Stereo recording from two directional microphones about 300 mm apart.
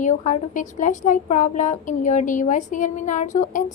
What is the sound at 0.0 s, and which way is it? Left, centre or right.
A woman's voice, left.